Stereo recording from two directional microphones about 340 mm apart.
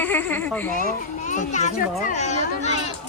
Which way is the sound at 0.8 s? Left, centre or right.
Left.